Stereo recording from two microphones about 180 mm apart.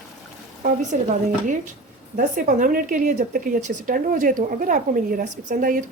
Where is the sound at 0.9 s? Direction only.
40° right (ahead or behind).